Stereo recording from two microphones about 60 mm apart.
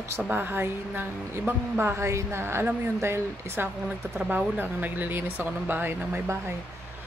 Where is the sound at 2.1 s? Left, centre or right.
Right.